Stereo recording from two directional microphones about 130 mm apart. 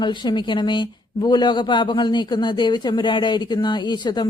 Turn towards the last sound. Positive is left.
turn(degrees=35)  # may be behind; listen again after turning